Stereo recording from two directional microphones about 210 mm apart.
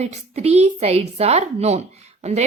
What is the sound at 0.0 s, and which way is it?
A woman's voice, 30° right (ahead or behind).